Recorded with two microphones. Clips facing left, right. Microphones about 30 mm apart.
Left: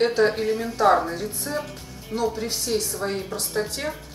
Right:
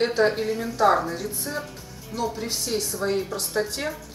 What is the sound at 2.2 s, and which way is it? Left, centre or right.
Speech, centre.